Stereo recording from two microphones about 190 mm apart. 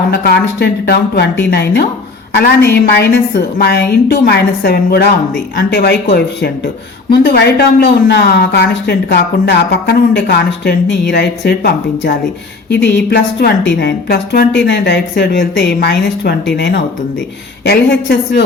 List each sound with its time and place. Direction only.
0.1 s speech: 60° left (ahead or behind)
7.1 s speech: 55° left (ahead or behind)